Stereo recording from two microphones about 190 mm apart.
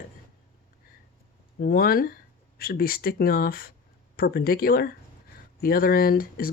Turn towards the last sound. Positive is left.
turn(degrees=50)  # may be behind; listen again after turning